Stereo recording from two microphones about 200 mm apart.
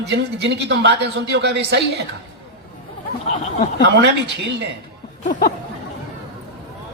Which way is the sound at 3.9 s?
60° right (ahead or behind).